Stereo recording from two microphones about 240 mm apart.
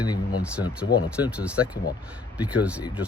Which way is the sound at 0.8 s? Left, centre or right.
Left.